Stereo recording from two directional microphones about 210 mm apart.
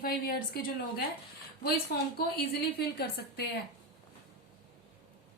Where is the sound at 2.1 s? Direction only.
50° left (ahead or behind).